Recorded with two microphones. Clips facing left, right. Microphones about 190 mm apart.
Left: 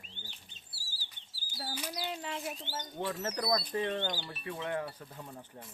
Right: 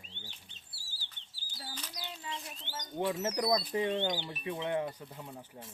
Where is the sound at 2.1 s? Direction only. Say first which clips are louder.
Left 6 dB; 65° left (ahead or behind).